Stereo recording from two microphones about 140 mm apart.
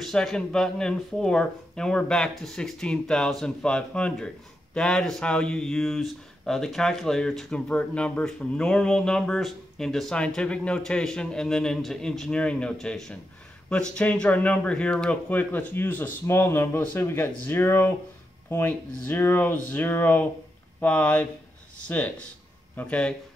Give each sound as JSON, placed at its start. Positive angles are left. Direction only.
{"t": 0.0, "sound": "speech", "side_deg": 5}